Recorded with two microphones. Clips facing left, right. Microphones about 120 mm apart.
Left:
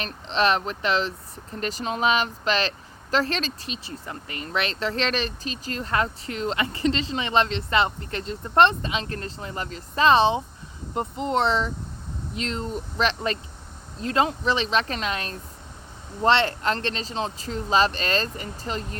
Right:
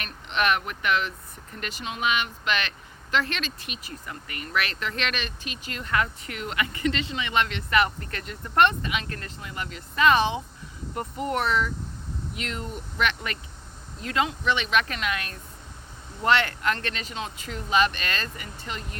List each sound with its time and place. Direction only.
0.0 s speech: 30° left (ahead or behind)